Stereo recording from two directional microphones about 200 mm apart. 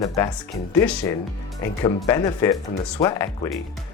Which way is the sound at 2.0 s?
15° left (ahead or behind).